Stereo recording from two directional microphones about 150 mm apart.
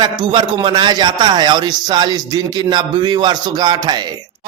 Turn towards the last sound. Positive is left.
turn(degrees=-30)  # may be behind; listen again after turning